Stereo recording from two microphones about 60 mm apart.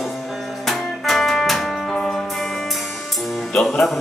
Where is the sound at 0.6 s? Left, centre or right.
Centre.